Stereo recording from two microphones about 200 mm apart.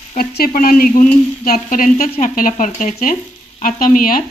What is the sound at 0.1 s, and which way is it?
Speech, 45° left (ahead or behind).